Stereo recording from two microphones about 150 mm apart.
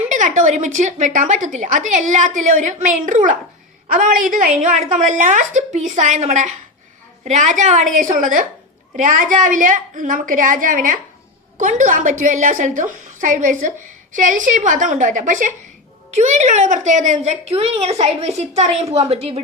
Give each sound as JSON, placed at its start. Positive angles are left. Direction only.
{"t": 0.1, "sound": "a woman's voice", "side_deg": -55}